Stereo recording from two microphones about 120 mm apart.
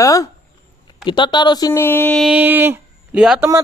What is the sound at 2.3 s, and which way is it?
Speech, 15° right (ahead or behind).